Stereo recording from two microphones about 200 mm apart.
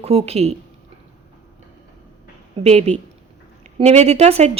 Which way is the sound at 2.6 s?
30° right (ahead or behind).